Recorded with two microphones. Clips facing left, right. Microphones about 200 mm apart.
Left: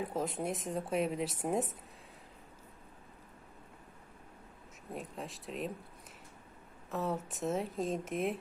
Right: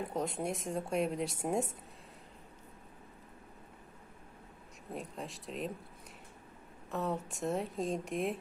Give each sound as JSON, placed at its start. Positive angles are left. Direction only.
{"t": 0.0, "sound": "speech", "side_deg": 0}
{"t": 4.9, "sound": "speech", "side_deg": 0}
{"t": 6.9, "sound": "speech", "side_deg": 0}